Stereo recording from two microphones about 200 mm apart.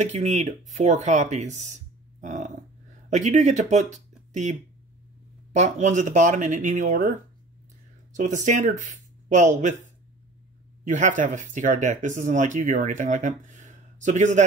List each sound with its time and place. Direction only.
0.0 s speech: 35° right (ahead or behind)
2.1 s a sound: 35° right (ahead or behind)
3.1 s speech: 35° right (ahead or behind)